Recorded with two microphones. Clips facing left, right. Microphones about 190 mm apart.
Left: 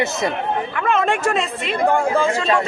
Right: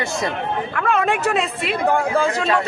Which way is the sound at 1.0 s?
10° right (ahead or behind).